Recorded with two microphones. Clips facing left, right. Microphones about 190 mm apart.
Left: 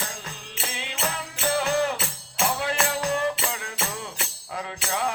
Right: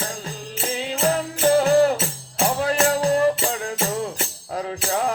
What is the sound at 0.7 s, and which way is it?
Music, 40° right (ahead or behind).